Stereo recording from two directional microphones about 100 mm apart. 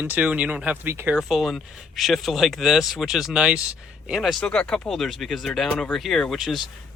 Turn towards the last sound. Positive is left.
turn(degrees=0)  # may be behind; listen again after turning